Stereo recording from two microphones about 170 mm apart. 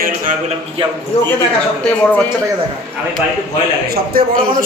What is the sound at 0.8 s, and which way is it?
Speech, 30° right (ahead or behind).